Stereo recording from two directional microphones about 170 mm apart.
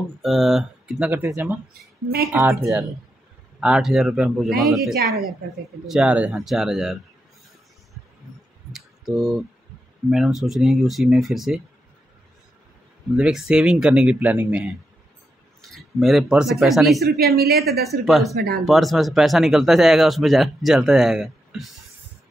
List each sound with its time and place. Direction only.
0.2 s speech: centre (ahead or behind); by 2.8 s 15° right (ahead or behind)
3.5 s speech: 5° right (ahead or behind)
8.7 s a sound: centre (ahead or behind)
10.1 s speech: centre (ahead or behind)
13.1 s speech: 5° right (ahead or behind)
17.2 s a woman's voice: 65° right (ahead or behind)
17.8 s speech: centre (ahead or behind)
18.3 s speech: 65° right (ahead or behind)
18.7 s speech: centre (ahead or behind)